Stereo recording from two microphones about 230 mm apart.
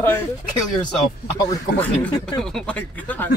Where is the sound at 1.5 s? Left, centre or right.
Centre.